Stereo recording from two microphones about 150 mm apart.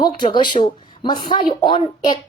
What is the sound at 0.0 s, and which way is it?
Speech, 30° left (ahead or behind).